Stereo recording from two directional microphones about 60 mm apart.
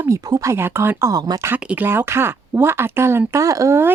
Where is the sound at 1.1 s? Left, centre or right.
Right.